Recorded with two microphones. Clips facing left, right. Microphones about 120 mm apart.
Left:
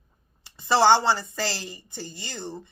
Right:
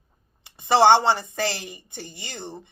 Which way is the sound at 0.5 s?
20° right (ahead or behind).